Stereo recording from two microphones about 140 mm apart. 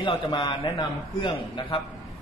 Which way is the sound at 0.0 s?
35° left (ahead or behind).